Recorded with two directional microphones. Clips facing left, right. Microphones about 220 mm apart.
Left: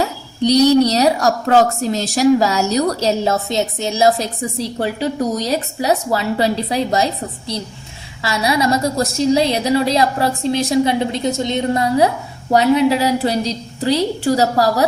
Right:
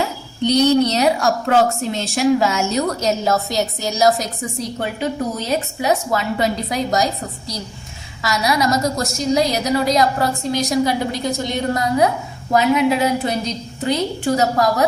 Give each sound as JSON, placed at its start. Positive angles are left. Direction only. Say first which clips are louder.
{"t": 0.4, "sound": "a woman's voice", "louder": "left 3 dB", "side_deg": 35}